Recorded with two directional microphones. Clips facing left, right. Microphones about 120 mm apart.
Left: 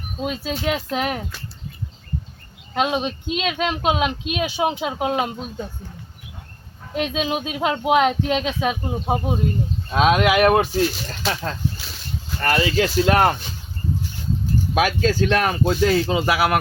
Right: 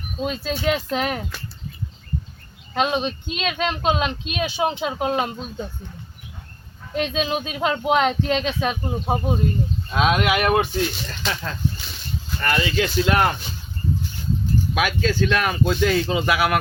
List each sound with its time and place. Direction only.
0.3 s speech: 10° left (ahead or behind)
2.7 s speech: 10° left (ahead or behind)
6.9 s speech: 10° left (ahead or behind)
9.9 s speech: 40° left (ahead or behind)
11.2 s speech: 5° left (ahead or behind)
11.8 s a sound: centre (ahead or behind)
12.4 s speech: 35° left (ahead or behind)
14.8 s speech: 40° left (ahead or behind)